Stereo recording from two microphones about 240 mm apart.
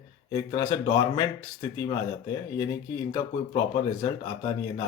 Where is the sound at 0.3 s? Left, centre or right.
Centre.